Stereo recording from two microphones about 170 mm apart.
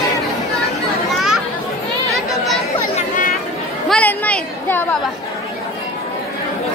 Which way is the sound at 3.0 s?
50° left (ahead or behind).